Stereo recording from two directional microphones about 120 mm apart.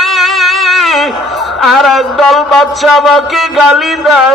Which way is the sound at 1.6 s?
Centre (ahead or behind).